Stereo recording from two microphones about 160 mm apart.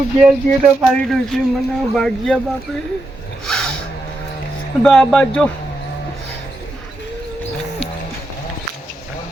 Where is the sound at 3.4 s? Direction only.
5° left (ahead or behind).